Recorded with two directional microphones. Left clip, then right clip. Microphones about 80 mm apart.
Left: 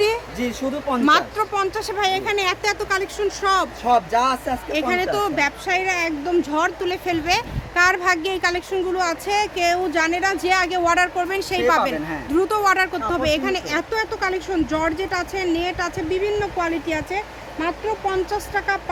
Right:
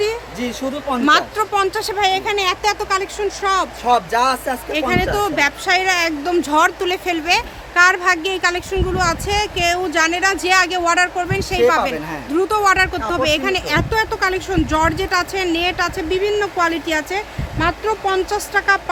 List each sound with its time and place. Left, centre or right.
0.0 s a sound: left
1.4 s speech: right
1.9 s speech: centre
2.2 s speech: centre
2.7 s speech: centre
4.1 s speech: right
4.7 s speech: centre
5.3 s speech: right
5.6 s speech: right
7.3 s speech: centre
10.9 s speech: centre
11.3 s speech: centre
12.4 s speech: centre; by 14.4 s right
14.4 s speech: right